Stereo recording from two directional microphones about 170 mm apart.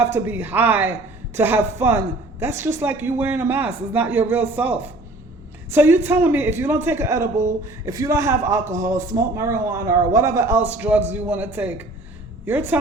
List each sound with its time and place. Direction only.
0.0 s speech: 15° right (ahead or behind)